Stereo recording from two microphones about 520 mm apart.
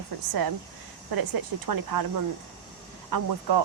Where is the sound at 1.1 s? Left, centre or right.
Right.